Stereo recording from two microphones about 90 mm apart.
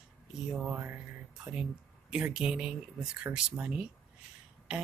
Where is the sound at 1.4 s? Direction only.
10° right (ahead or behind).